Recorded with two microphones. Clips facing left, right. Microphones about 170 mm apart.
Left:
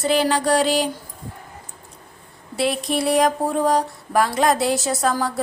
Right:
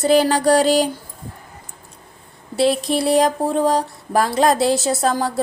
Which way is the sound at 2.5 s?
30° right (ahead or behind).